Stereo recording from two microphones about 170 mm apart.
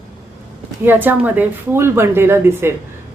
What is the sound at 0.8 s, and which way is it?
A woman's voice, 10° right (ahead or behind).